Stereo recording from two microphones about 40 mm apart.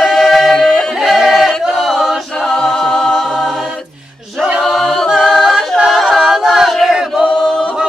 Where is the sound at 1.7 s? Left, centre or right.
Centre.